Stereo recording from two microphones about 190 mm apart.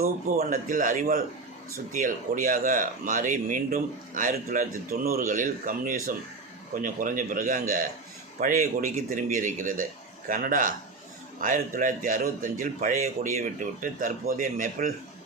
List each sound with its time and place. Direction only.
0.0 s speech: 50° right (ahead or behind)